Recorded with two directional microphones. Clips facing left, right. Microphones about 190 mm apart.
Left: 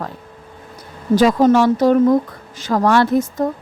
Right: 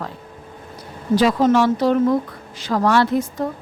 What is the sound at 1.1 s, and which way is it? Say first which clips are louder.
A woman's voice: left 3 dB; 45° left (ahead or behind).